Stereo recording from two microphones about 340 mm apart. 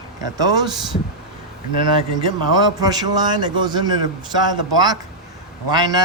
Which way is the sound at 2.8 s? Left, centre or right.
Centre.